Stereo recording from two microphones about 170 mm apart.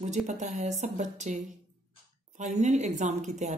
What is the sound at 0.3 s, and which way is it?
Speech, 45° right (ahead or behind).